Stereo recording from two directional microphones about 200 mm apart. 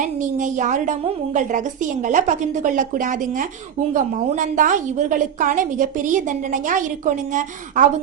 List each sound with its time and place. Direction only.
0.0 s a woman's voice: 40° right (ahead or behind)